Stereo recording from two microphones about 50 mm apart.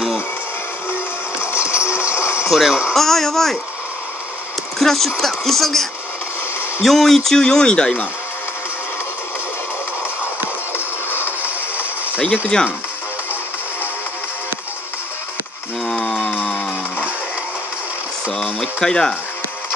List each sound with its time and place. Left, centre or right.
1.4 s music: left
2.0 s a sound: left
2.5 s speech: centre
2.9 s speech: centre
4.7 s speech: centre
11.1 s a sound: left
12.5 s speech: centre
16.0 s music: centre
18.4 s a sound: centre